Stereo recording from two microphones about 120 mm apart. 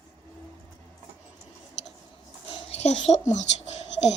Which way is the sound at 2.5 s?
65° left (ahead or behind).